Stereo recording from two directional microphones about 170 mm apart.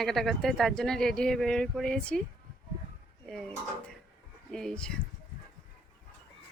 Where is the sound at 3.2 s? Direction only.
5° left (ahead or behind).